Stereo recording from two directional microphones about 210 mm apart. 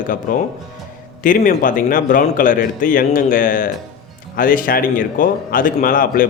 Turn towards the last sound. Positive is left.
turn(degrees=40)  # may be behind; listen again after turning